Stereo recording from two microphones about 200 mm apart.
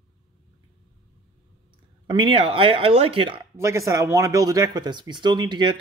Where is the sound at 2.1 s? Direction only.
25° right (ahead or behind).